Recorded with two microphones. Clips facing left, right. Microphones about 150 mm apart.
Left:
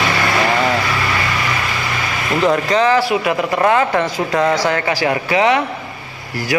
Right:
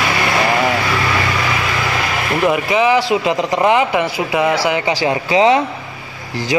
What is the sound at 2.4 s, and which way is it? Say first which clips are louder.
A man's voice: even; 10° right (ahead or behind).